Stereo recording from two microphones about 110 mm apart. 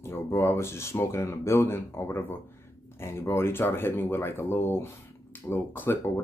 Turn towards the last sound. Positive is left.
turn(degrees=20)  # may be behind; listen again after turning